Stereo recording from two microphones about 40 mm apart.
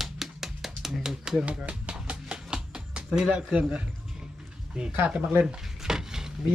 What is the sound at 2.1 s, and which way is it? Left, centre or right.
Music, right.